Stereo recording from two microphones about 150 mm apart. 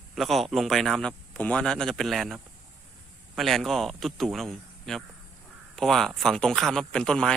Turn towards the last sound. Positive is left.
turn(degrees=5)  # may be behind; listen again after turning